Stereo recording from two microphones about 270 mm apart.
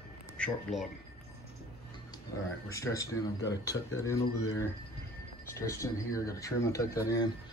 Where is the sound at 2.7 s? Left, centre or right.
Centre.